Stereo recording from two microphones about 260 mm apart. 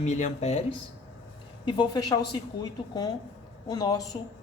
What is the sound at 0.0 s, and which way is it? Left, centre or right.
Speech, left.